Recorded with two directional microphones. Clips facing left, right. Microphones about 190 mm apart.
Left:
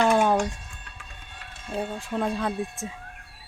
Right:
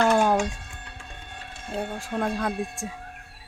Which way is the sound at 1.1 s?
55° right (ahead or behind).